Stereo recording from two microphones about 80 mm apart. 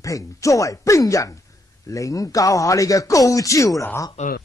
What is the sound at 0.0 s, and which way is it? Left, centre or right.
Speech, left.